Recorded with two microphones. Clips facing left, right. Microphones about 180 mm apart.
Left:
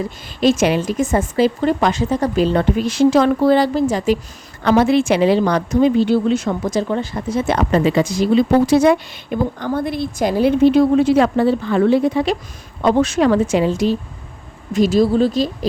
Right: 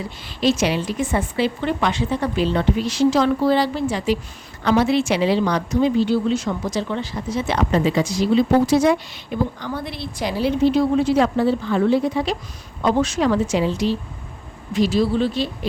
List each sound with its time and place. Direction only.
0.0 s a woman's voice: 50° left (ahead or behind)